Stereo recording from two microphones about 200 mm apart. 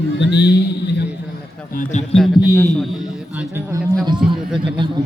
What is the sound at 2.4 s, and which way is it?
Speech, 15° left (ahead or behind).